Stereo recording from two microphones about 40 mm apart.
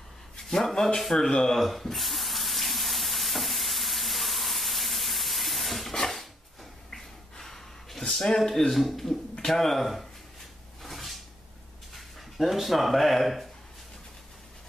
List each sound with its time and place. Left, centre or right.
0.4 s speech: centre
1.6 s water tap: centre
5.9 s a sound: centre
8.2 s speech: centre
10.8 s cupboard open or close: centre
11.9 s speech: centre